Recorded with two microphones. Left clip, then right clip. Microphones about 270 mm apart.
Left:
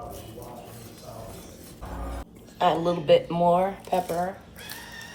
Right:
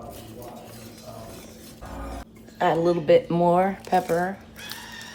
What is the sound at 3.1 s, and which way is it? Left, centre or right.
Speech, right.